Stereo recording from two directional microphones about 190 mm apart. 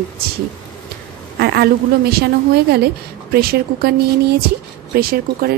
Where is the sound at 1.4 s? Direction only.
55° right (ahead or behind).